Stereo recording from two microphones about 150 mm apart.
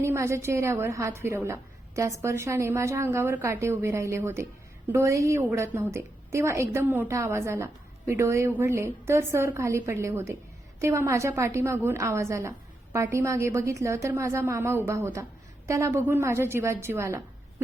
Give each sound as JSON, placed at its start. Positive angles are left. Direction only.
{"t": 0.0, "sound": "a woman's voice", "side_deg": -20}